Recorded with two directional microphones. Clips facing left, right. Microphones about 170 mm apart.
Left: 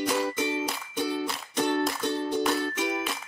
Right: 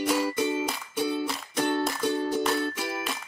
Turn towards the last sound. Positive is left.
turn(degrees=-5)  # may be behind; listen again after turning